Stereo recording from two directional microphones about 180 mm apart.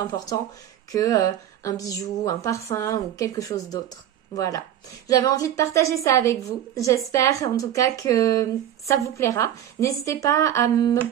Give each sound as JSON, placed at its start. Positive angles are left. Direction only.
{"t": 0.0, "sound": "a woman's voice", "side_deg": 20}